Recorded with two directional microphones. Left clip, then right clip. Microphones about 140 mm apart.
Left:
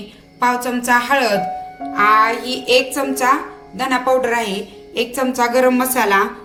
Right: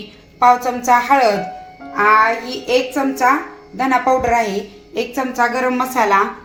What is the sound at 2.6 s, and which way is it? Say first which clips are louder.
Speech: left 1 dB; 30° right (ahead or behind).